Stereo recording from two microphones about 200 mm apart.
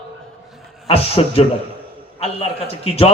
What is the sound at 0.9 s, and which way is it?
Speech, 30° left (ahead or behind).